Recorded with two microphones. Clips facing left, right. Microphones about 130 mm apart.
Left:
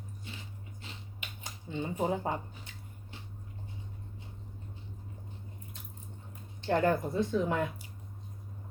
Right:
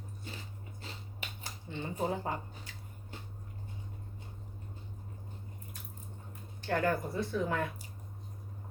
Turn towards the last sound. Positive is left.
turn(degrees=15)  # may be behind; listen again after turning